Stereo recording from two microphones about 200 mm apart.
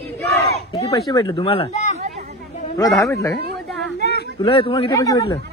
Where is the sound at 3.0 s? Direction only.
15° left (ahead or behind).